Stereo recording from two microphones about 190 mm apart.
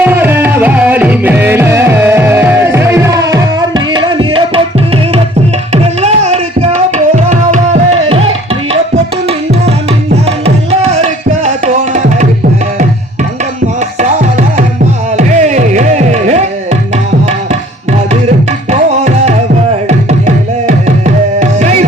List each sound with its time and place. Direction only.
0.0 s music: 10° right (ahead or behind)
3.9 s tabla: 25° right (ahead or behind)
5.7 s music: 35° right (ahead or behind)
7.3 s tabla: 40° right (ahead or behind)
10.4 s tabla: 35° right (ahead or behind)
15.2 s music: 40° right (ahead or behind)
18.1 s music: 35° right (ahead or behind)